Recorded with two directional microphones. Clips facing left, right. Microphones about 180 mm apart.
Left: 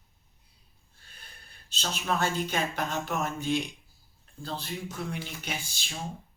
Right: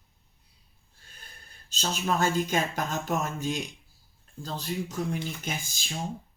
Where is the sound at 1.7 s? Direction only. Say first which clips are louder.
Right 2 dB; 45° right (ahead or behind).